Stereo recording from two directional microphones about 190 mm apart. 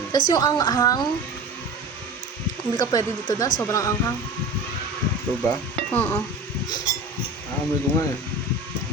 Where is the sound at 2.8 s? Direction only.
20° left (ahead or behind).